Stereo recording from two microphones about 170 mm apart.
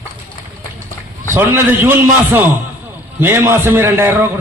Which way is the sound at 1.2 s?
15° right (ahead or behind).